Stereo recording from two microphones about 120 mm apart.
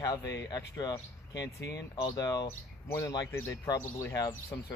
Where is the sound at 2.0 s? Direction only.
30° left (ahead or behind).